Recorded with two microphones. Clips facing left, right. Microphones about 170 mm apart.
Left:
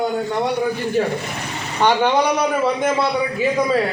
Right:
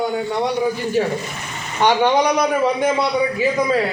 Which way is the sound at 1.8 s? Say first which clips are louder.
Right 1 dB; 10° right (ahead or behind).